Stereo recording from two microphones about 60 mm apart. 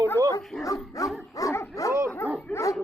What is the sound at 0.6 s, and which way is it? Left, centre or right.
Speech, left.